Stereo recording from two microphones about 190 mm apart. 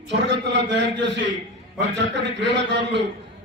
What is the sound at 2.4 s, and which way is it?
Speech, 65° right (ahead or behind).